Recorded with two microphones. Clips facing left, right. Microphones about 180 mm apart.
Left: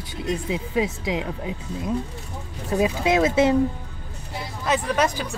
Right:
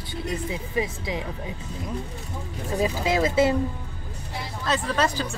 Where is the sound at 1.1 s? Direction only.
20° left (ahead or behind).